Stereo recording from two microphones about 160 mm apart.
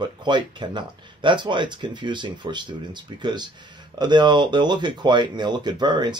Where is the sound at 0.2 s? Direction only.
30° right (ahead or behind).